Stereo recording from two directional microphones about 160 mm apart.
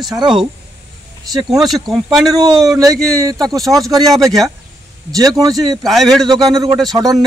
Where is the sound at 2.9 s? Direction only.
5° left (ahead or behind).